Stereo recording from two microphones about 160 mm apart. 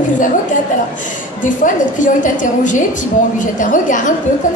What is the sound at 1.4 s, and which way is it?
A woman's voice, 55° left (ahead or behind).